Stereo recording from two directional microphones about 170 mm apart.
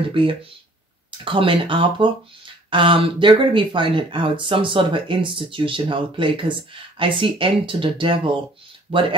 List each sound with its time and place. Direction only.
0.1 s speech: 30° right (ahead or behind)